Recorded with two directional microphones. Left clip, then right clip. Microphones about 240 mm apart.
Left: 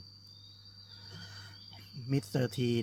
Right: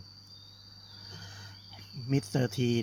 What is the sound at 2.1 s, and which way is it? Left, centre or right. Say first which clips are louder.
Speech: right 3 dB; centre.